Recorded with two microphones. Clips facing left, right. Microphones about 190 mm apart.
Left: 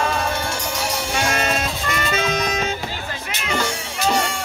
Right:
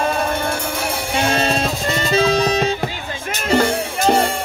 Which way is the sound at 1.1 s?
30° right (ahead or behind).